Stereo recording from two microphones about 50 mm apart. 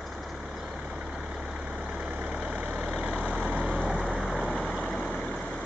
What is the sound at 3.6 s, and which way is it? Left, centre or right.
Vehicle, centre.